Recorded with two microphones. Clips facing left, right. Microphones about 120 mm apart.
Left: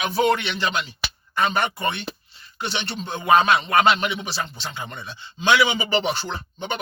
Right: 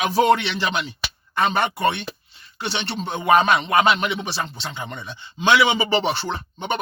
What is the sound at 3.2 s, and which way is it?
Speech, 20° right (ahead or behind).